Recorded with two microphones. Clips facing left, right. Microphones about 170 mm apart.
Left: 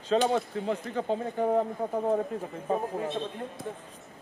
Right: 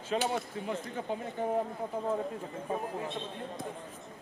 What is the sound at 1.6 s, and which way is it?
Speech, 50° left (ahead or behind).